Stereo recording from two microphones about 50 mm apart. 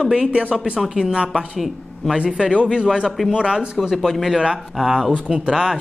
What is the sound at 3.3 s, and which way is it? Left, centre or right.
Speech, centre.